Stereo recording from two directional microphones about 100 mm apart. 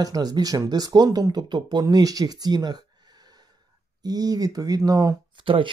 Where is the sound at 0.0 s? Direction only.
40° right (ahead or behind).